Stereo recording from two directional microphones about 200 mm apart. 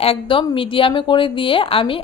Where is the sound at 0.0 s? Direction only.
25° left (ahead or behind).